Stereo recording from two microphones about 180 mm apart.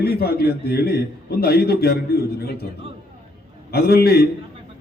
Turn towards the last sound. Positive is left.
turn(degrees=60)  # may be behind; listen again after turning